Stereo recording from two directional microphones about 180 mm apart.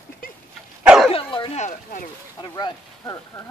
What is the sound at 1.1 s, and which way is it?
Speech, 30° left (ahead or behind).